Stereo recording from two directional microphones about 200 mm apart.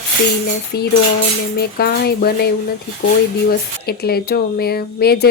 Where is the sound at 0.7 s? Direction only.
55° left (ahead or behind).